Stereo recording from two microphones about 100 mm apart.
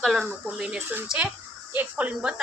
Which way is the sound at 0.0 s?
5° left (ahead or behind).